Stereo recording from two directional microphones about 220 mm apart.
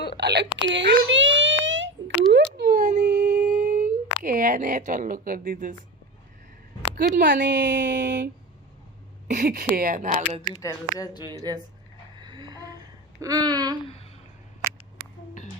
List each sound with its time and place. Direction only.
0.2 s speech: 50° right (ahead or behind)
0.4 s a woman's voice: 25° left (ahead or behind)
0.7 s a sound: 55° right (ahead or behind); by 5.7 s 40° right (ahead or behind)
6.9 s speech: 40° right (ahead or behind)
10.5 s speech: 15° left (ahead or behind)
11.3 s a sound: 20° right (ahead or behind)